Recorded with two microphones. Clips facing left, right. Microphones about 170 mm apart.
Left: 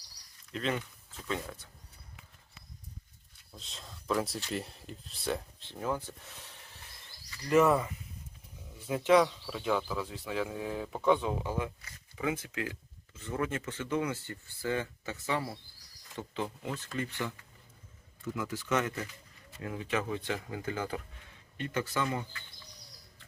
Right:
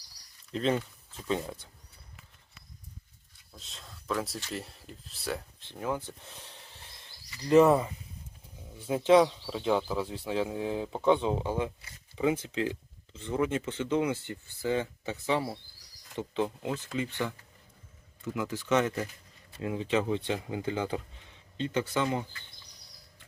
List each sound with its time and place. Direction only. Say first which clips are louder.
0.5 s speech: right 5 dB; 30° right (ahead or behind)
3.6 s speech: left 1 dB; centre (ahead or behind)
5.5 s speech: right 1 dB; 15° right (ahead or behind)
7.4 s speech: right 4 dB; 25° right (ahead or behind)
18.3 s speech: right 4 dB; 20° right (ahead or behind)